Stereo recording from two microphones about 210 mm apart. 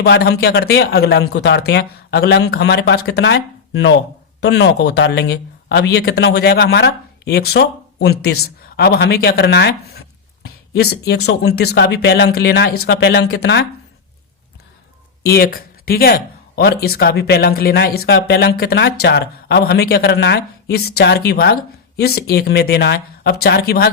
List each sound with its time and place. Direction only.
0.0 s speech: 50° left (ahead or behind)
15.2 s speech: 50° left (ahead or behind)